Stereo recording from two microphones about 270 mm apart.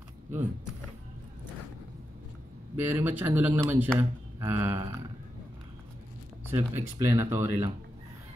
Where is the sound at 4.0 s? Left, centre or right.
Centre.